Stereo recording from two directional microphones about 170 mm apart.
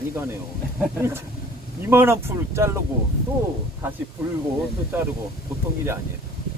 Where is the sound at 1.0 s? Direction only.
15° right (ahead or behind).